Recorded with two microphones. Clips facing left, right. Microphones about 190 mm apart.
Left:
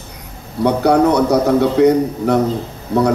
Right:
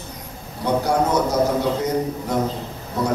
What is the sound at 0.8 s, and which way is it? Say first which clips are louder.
A man's voice: left 8 dB; 65° left (ahead or behind).